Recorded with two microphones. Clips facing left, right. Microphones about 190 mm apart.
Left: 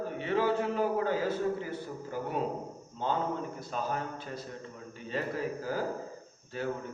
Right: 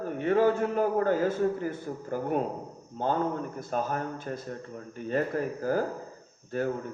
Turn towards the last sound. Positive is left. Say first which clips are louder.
# right 6 dB
turn(degrees=-50)  # may be behind; listen again after turning